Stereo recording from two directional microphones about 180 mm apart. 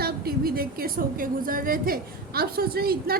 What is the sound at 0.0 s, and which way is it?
A woman's voice, 55° right (ahead or behind).